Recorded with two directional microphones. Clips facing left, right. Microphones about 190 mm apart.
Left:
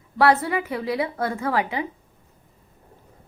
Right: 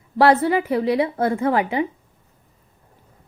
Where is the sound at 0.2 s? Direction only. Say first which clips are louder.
Right 4 dB; 30° right (ahead or behind).